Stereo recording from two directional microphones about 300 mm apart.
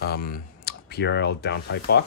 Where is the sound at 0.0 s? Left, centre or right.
Left.